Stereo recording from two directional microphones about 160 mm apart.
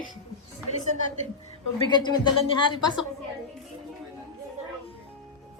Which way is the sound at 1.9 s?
25° left (ahead or behind).